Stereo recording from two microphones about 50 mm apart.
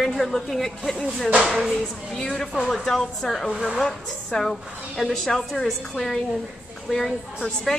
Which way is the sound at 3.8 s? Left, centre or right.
Centre.